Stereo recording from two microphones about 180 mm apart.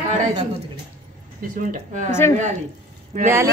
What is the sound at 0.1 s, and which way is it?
Speech, 40° right (ahead or behind).